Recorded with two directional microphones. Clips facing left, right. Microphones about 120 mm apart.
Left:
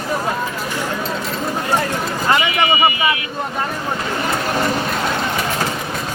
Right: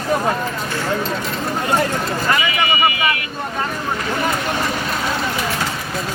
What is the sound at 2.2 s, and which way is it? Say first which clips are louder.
Speech: left 4 dB; 25° left (ahead or behind).